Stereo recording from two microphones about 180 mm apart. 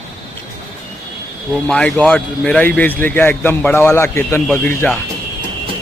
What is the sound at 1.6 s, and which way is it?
Speech, 5° left (ahead or behind).